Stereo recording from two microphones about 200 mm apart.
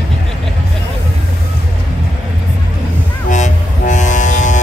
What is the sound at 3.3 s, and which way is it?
Vehicle, 40° left (ahead or behind).